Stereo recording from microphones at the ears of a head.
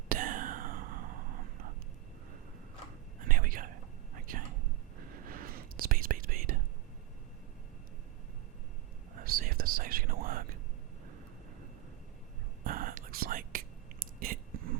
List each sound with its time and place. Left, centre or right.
0.1 s whispering: right
3.2 s whispering: right
9.1 s whispering: right
12.6 s whispering: right